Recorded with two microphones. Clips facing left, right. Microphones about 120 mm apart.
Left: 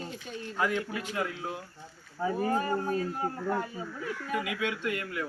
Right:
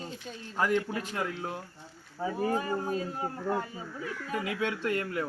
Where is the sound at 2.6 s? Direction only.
25° right (ahead or behind).